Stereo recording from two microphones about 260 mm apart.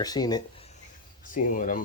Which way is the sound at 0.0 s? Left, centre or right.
Centre.